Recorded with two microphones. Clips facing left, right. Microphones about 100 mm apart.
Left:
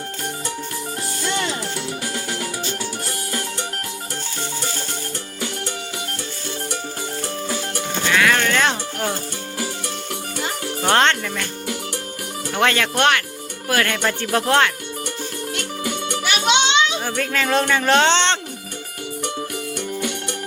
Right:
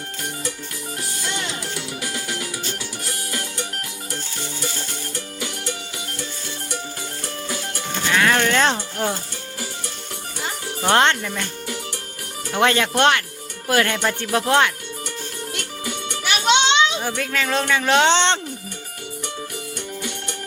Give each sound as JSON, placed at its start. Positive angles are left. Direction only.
{"t": 8.1, "sound": "music", "side_deg": -25}
{"t": 10.8, "sound": "speech", "side_deg": -15}
{"t": 12.5, "sound": "speech", "side_deg": -20}
{"t": 14.0, "sound": "speech", "side_deg": -10}
{"t": 16.2, "sound": "music", "side_deg": 0}
{"t": 17.0, "sound": "children playing", "side_deg": -20}
{"t": 17.3, "sound": "speech", "side_deg": 0}